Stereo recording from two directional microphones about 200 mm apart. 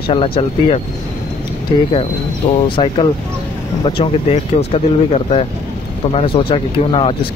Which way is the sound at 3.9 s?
30° left (ahead or behind).